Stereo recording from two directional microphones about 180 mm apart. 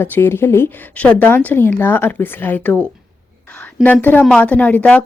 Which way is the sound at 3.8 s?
10° left (ahead or behind).